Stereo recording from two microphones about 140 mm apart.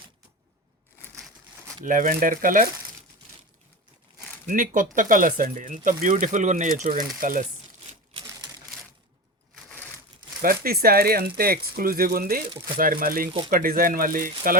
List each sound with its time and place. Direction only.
1.8 s speech: 70° right (ahead or behind)
4.4 s speech: 70° right (ahead or behind)
8.1 s a sound: 30° right (ahead or behind)
9.6 s crumpling: 10° left (ahead or behind)
10.4 s speech: 90° right